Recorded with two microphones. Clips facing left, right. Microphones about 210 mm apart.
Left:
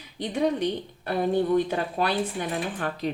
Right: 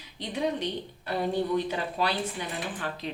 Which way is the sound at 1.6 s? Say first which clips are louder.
Left 3 dB; 50° left (ahead or behind).